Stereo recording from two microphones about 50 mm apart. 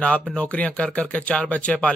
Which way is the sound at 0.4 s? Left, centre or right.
Left.